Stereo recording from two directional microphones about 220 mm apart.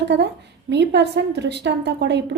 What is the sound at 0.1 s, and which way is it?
A woman's voice, 50° right (ahead or behind).